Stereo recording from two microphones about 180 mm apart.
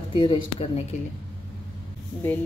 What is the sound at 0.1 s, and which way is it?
Speech, 30° left (ahead or behind).